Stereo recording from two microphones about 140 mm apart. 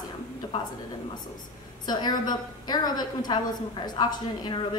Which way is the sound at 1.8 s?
30° left (ahead or behind).